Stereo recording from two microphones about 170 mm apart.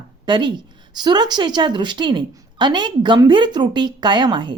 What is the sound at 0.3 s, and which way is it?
A woman's voice, 25° right (ahead or behind).